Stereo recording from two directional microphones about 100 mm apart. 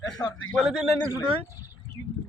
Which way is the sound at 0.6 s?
Centre (ahead or behind).